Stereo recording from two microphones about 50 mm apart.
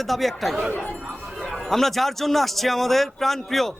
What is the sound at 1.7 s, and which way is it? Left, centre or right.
A man's voice, centre.